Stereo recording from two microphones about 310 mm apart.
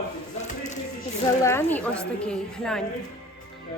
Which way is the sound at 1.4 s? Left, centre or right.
Centre.